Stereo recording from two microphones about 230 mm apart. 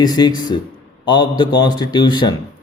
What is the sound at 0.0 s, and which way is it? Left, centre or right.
A man's voice, centre.